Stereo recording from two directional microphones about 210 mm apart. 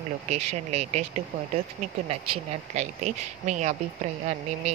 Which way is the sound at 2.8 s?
35° right (ahead or behind).